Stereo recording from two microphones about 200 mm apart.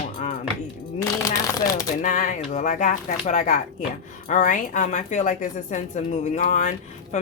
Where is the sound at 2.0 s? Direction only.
40° left (ahead or behind).